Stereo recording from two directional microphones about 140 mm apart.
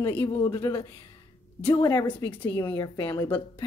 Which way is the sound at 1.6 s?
25° left (ahead or behind).